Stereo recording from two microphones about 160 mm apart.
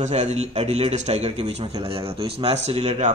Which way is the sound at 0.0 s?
45° right (ahead or behind).